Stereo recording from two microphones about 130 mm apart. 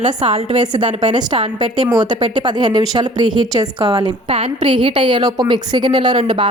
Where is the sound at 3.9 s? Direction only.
45° right (ahead or behind).